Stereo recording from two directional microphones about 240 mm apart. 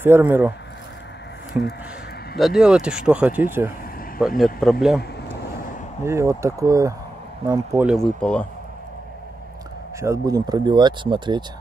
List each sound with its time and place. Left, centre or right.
0.0 s speech: centre
5.3 s vehicle: left
6.0 s speech: centre
9.9 s speech: centre